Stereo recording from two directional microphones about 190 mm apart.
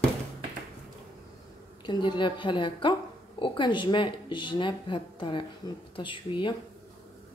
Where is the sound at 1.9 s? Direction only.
25° left (ahead or behind).